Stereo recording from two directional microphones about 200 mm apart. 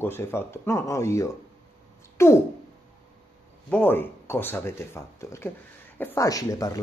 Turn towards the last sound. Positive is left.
turn(degrees=15)  # may be behind; listen again after turning